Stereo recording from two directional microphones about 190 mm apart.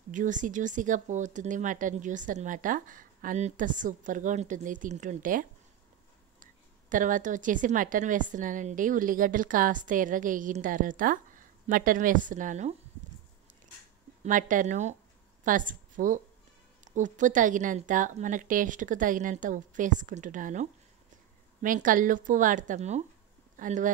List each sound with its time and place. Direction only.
0.1 s a woman's voice: 40° right (ahead or behind)
14.2 s a woman's voice: 45° right (ahead or behind)
21.6 s a woman's voice: 45° right (ahead or behind)